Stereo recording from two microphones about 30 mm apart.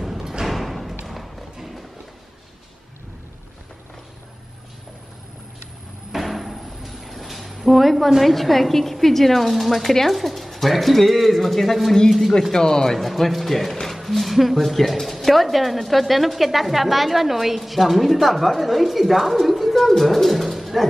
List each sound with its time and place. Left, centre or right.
0.2 s music: centre
0.5 s thump: centre
1.0 s music: centre
6.1 s a sound: centre
8.2 s a woman's voice: centre
12.5 s speech: left
12.9 s a woman's voice: centre